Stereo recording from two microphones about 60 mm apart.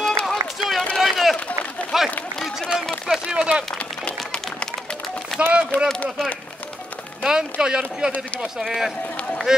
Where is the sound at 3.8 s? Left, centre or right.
Centre.